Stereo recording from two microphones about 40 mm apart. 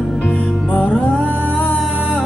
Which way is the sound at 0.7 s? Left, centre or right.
Centre.